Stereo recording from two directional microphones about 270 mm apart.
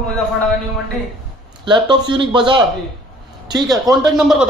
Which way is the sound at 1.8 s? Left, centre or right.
Centre.